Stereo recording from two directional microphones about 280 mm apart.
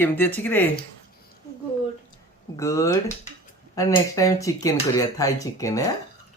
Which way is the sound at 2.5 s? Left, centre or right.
Centre.